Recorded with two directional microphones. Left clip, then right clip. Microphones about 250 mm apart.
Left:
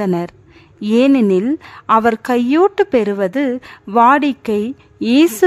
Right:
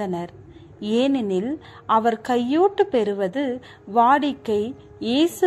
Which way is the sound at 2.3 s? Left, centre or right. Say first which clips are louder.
Left 5 dB; left.